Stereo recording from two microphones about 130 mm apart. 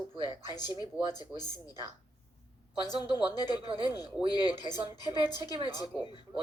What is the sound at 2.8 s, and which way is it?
Speech, 30° left (ahead or behind).